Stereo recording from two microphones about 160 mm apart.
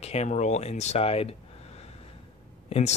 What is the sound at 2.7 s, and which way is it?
Speech, 40° left (ahead or behind).